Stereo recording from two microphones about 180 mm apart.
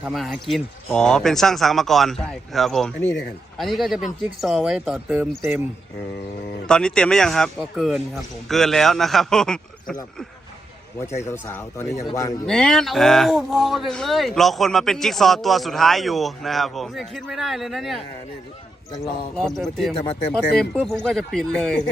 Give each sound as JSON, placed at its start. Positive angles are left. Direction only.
{"t": 0.0, "sound": "speech", "side_deg": 0}
{"t": 5.4, "sound": "speech", "side_deg": -15}
{"t": 6.7, "sound": "speech", "side_deg": 5}
{"t": 11.3, "sound": "speech", "side_deg": 15}
{"t": 12.5, "sound": "speech", "side_deg": 5}
{"t": 19.4, "sound": "speech", "side_deg": 0}